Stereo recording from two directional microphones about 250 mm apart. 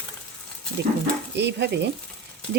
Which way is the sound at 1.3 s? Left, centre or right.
Right.